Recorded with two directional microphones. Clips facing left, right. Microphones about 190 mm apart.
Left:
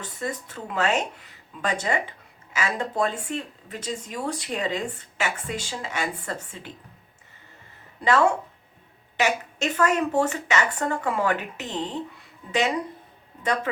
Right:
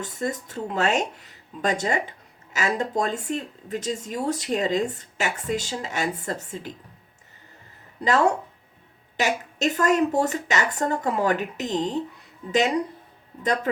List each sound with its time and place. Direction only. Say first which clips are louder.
0.2 s speech: right 3 dB; 40° right (ahead or behind)
9.1 s speech: left 1 dB; 40° right (ahead or behind)